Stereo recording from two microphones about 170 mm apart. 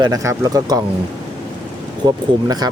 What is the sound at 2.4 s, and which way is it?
Speech, 25° right (ahead or behind).